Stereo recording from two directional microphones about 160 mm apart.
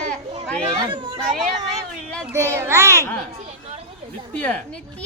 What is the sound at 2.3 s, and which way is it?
Speech, 15° right (ahead or behind).